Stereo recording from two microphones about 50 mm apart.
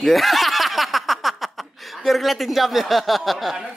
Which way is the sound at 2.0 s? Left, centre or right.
Centre.